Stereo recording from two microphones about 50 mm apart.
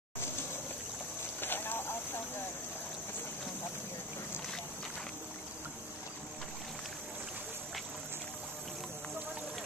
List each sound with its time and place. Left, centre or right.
1.4 s vehicle: left